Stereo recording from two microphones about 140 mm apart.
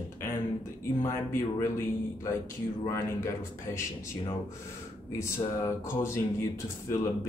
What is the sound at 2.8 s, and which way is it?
Speech, 20° left (ahead or behind).